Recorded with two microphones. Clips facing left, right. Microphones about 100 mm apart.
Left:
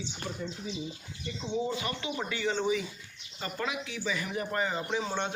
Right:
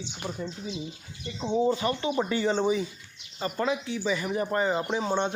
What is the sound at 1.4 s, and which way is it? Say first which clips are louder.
Speech: right 7 dB; 35° right (ahead or behind).